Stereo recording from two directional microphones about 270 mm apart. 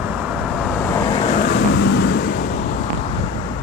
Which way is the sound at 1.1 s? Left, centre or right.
Left.